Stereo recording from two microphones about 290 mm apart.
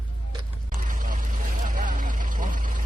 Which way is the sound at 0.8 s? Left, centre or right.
Right.